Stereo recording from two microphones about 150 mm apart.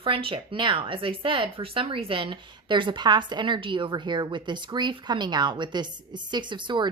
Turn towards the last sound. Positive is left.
turn(degrees=-30)  # may be behind; listen again after turning